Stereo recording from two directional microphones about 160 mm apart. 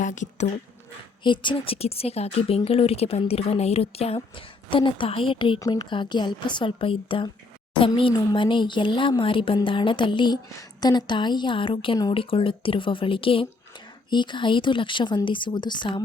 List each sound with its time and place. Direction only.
0.0 s speech: 50° left (ahead or behind)
1.2 s speech: 30° left (ahead or behind)
5.5 s speech: 20° left (ahead or behind)